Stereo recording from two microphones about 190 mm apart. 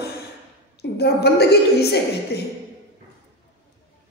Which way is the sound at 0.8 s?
60° left (ahead or behind).